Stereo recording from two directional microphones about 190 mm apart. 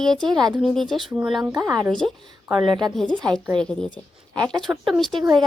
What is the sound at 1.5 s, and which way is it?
Speech, 20° right (ahead or behind).